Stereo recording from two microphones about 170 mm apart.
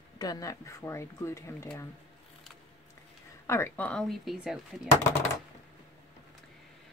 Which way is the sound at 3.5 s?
15° left (ahead or behind).